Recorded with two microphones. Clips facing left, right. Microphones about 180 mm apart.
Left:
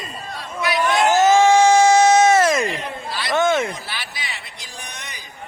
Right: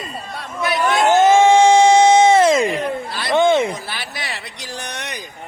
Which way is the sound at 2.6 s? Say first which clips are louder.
Right 6 dB; 55° right (ahead or behind).